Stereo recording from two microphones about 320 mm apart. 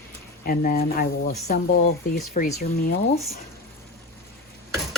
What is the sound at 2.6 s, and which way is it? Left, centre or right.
Speech, left.